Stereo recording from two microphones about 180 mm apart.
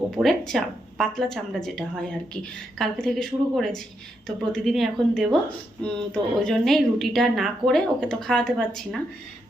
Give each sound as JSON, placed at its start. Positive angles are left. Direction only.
{"t": 0.1, "sound": "speech", "side_deg": 0}